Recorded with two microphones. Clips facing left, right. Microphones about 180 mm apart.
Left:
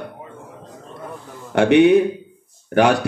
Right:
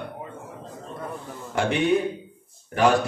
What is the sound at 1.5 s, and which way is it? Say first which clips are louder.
Speech: left 10 dB; 70° left (ahead or behind).